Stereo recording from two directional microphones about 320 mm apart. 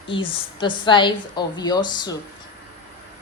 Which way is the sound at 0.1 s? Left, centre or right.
Centre.